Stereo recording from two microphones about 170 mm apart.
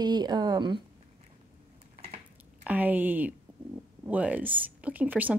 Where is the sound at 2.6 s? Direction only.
10° right (ahead or behind).